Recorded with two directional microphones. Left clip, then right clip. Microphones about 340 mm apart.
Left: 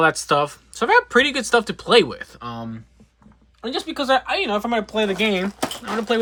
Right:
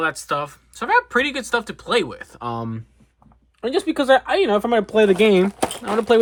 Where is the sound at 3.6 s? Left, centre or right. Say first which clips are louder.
Right 4 dB; centre.